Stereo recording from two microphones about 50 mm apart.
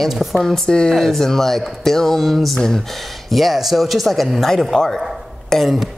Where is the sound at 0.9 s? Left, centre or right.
Centre.